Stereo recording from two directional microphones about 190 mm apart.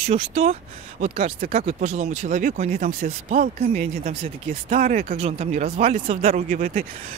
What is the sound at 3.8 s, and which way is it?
Speech, 35° right (ahead or behind).